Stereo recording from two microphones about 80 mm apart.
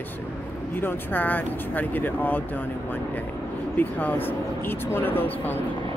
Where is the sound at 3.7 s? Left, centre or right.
Left.